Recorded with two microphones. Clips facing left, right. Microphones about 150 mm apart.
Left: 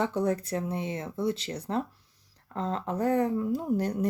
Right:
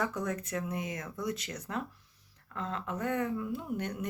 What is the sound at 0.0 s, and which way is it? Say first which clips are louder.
A woman's voice: left 6 dB; 30° left (ahead or behind).